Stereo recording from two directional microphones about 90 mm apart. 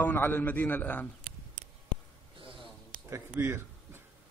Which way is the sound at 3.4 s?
30° right (ahead or behind).